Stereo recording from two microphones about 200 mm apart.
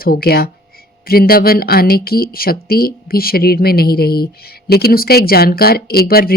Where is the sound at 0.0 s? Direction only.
50° left (ahead or behind).